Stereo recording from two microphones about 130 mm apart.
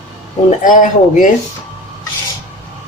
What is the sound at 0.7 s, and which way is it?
Speech, 80° left.